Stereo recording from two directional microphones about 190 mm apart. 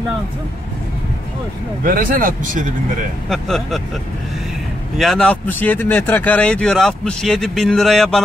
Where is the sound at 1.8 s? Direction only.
45° right (ahead or behind).